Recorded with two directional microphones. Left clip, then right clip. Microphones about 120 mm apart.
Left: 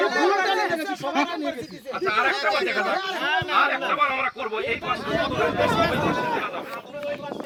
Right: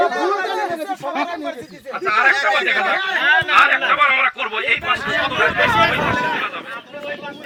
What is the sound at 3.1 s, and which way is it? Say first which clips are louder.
Speech: right 9 dB; 10° left (ahead or behind).